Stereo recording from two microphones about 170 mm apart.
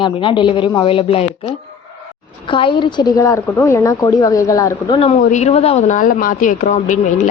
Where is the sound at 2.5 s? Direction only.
30° left (ahead or behind).